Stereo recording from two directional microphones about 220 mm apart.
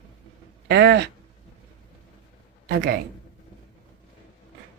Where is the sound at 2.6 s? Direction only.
45° right (ahead or behind).